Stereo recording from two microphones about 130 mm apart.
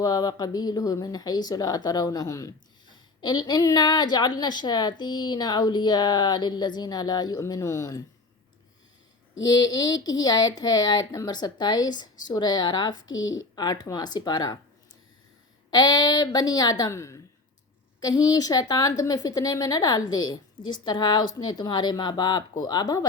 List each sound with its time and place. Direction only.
0.0 s speech: 30° left (ahead or behind)
9.4 s speech: 30° left (ahead or behind)
15.7 s speech: 30° left (ahead or behind)